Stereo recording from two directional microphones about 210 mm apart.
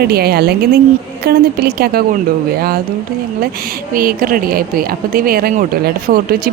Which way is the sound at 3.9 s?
45° right (ahead or behind).